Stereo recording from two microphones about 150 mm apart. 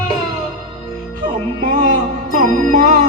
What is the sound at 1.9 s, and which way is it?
Music, 60° right (ahead or behind).